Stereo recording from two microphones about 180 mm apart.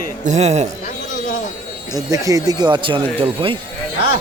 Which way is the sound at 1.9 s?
20° right (ahead or behind).